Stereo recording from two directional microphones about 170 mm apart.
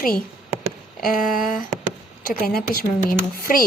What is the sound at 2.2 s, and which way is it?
Speech, 60° left (ahead or behind).